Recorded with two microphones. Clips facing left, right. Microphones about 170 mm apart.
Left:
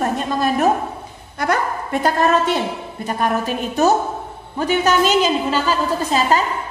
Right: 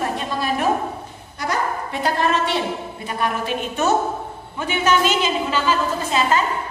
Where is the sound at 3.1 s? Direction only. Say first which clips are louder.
Left 3 dB; 40° left (ahead or behind).